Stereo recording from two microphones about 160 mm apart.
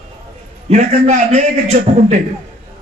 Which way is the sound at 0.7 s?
45° right (ahead or behind).